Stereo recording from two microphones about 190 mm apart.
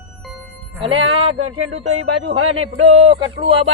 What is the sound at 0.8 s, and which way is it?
Speech, 30° right (ahead or behind).